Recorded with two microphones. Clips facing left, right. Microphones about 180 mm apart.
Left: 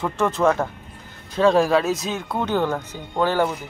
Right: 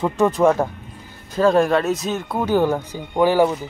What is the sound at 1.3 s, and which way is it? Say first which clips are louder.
A man's voice: right 1 dB; centre (ahead or behind).